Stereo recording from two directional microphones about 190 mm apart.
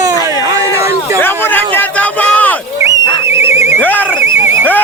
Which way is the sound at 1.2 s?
10° left (ahead or behind).